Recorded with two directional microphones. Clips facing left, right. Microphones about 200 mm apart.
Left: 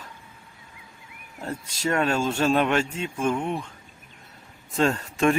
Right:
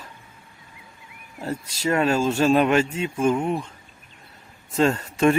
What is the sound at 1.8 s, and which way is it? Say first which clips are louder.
Speech: right 3 dB; 5° right (ahead or behind).